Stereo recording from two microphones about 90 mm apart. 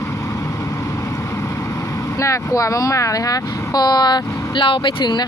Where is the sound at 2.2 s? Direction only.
35° left (ahead or behind).